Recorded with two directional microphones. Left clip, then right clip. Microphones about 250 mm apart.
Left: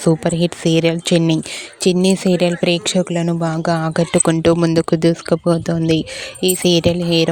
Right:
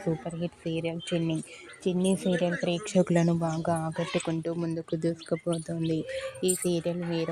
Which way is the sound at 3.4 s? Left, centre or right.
Left.